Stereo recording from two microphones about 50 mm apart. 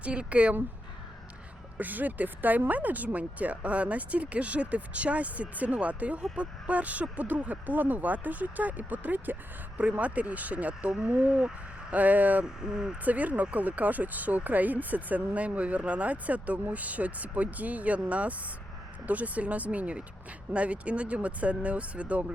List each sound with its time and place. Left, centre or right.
0.0 s speech: right
1.8 s speech: right
12.6 s speech: centre
13.1 s speech: right